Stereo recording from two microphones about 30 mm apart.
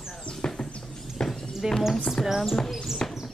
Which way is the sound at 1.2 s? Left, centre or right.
Centre.